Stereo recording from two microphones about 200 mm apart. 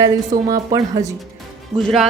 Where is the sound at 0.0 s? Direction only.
15° right (ahead or behind).